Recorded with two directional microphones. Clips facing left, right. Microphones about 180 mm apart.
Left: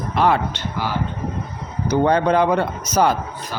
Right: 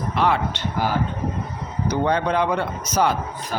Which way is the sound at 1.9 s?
45° left (ahead or behind).